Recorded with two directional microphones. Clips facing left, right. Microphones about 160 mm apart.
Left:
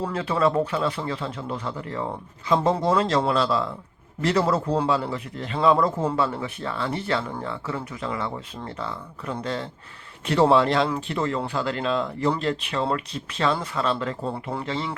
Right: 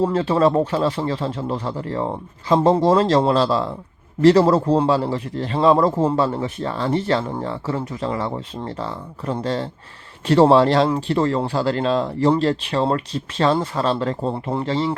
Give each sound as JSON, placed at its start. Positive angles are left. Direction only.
{"t": 0.0, "sound": "a man's voice", "side_deg": -30}